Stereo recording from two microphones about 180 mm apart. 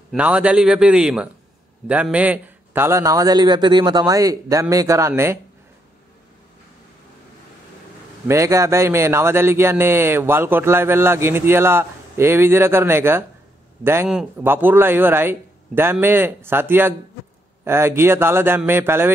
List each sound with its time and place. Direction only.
0.1 s a man's voice: 5° right (ahead or behind)
8.3 s speech: 15° right (ahead or behind)